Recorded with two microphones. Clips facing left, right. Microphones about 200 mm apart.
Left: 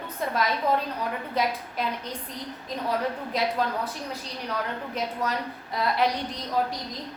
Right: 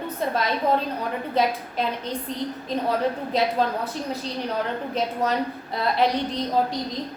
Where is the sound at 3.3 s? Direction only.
25° right (ahead or behind).